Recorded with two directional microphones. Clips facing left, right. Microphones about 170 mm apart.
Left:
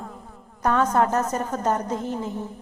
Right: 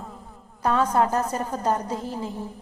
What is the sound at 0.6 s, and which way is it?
A woman's voice, 30° right (ahead or behind).